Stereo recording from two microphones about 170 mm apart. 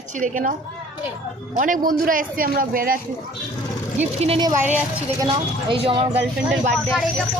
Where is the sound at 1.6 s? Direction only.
50° right (ahead or behind).